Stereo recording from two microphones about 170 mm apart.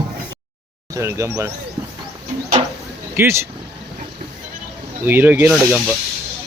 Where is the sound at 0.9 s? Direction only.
15° right (ahead or behind).